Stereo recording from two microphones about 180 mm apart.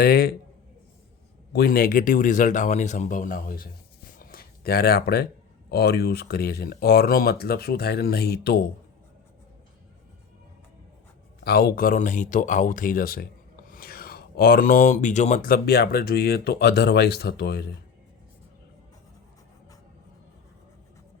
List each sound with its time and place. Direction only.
0.0 s speech: 60° left (ahead or behind)
1.5 s speech: 55° left (ahead or behind)
4.2 s a sound: 55° left (ahead or behind)
5.6 s speech: 65° left (ahead or behind)
11.4 s speech: 60° left (ahead or behind)